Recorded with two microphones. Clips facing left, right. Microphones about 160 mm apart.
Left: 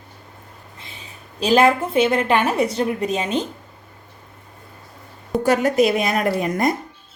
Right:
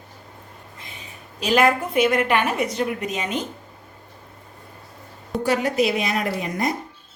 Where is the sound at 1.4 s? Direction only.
30° left (ahead or behind).